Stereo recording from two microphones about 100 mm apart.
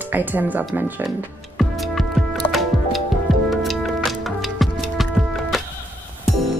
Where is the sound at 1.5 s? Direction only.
Centre (ahead or behind).